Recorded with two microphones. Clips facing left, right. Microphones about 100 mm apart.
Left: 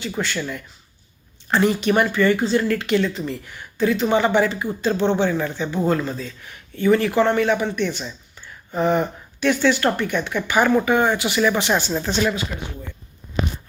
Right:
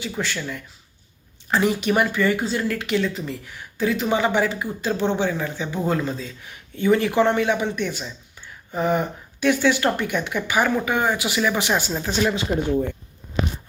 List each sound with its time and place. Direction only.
0.0 s speech: centre (ahead or behind)
12.5 s speech: 35° right (ahead or behind)